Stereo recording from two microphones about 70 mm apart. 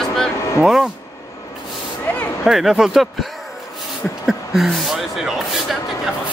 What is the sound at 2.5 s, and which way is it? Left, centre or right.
Speech, centre.